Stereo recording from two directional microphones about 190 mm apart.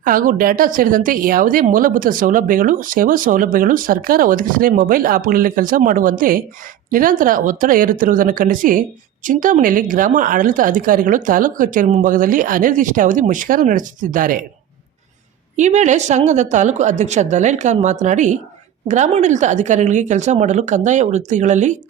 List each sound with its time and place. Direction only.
0.0 s speech: 45° right (ahead or behind)
15.5 s speech: 40° right (ahead or behind)